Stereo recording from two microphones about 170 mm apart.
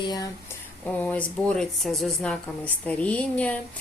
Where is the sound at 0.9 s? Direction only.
10° left (ahead or behind).